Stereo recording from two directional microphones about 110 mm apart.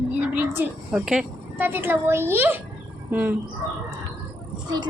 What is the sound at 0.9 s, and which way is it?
Speech, 5° right (ahead or behind).